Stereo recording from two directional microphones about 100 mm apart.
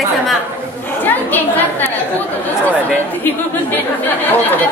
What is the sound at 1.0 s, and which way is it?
Speech, 20° left (ahead or behind).